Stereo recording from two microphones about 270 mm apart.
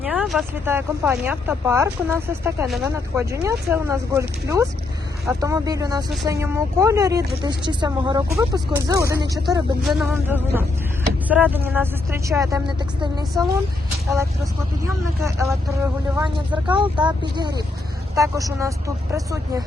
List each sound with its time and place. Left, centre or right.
0.0 s speech: centre
9.8 s a sound: centre
11.3 s speech: centre
14.8 s speech: centre
18.1 s speech: centre